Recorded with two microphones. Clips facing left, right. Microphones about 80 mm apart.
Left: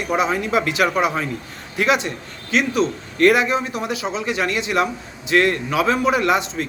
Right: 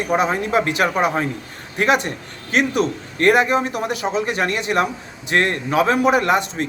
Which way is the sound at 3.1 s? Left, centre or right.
Right.